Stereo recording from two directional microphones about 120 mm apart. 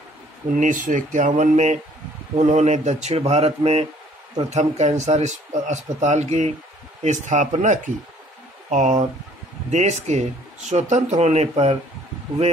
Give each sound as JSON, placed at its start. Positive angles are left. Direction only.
{"t": 0.6, "sound": "speech", "side_deg": -90}
{"t": 7.0, "sound": "speech", "side_deg": -85}
{"t": 9.7, "sound": "speech", "side_deg": -75}